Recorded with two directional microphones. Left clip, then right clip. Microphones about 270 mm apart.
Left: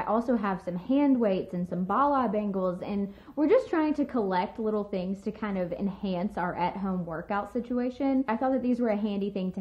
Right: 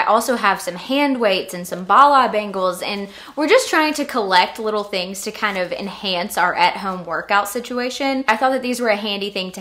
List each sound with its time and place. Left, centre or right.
0.0 s a woman's voice: centre
6.9 s a woman's voice: centre
7.2 s a woman's voice: centre